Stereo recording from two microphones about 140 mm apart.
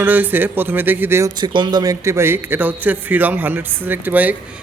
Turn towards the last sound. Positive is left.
turn(degrees=-10)  # may be behind; listen again after turning